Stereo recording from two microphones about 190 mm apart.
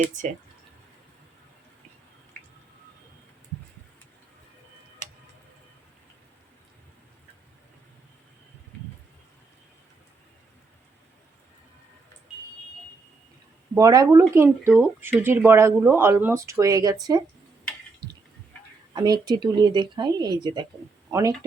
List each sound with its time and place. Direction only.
13.7 s speech: 20° right (ahead or behind)
18.9 s speech: 20° right (ahead or behind)